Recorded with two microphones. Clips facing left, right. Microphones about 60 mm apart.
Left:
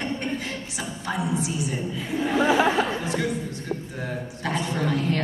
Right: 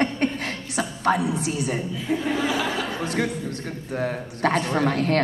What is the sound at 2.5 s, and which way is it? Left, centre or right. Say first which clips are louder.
Speech: left 5 dB; left.